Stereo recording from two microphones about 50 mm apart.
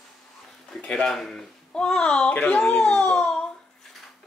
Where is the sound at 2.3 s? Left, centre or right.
Left.